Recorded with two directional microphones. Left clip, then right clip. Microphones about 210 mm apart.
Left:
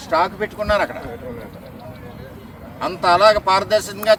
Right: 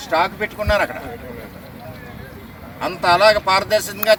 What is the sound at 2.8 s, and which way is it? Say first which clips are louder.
Speech: even; 5° left (ahead or behind).